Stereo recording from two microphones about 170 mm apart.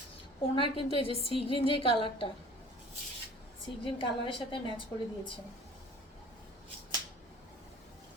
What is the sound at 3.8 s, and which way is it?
Speech, 30° left (ahead or behind).